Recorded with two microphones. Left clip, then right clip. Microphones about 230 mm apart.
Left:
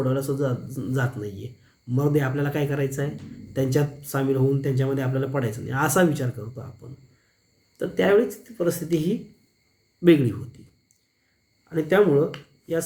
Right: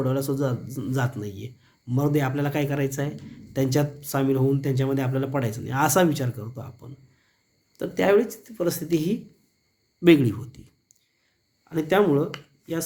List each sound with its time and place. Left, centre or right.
0.0 s a man's voice: right
11.7 s a man's voice: right